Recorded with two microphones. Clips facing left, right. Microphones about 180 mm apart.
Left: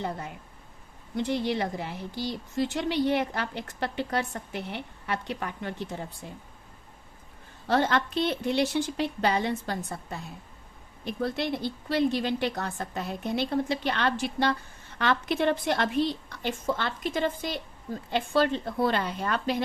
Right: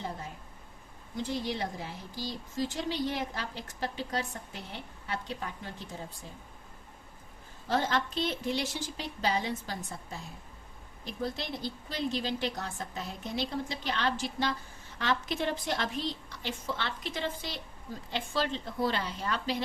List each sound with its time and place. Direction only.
1.1 s a woman's voice: 65° left (ahead or behind)
7.7 s a woman's voice: 65° left (ahead or behind)